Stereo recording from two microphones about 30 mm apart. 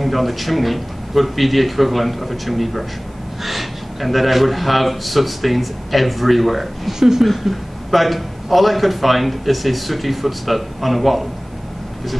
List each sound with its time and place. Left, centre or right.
0.0 s a man's voice: centre
6.9 s speech: centre
7.4 s a man's voice: centre